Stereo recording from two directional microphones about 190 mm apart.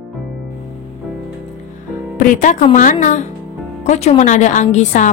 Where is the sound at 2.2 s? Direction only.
45° left (ahead or behind).